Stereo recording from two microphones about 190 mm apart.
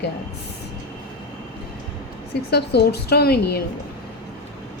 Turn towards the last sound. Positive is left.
turn(degrees=55)  # may be behind; listen again after turning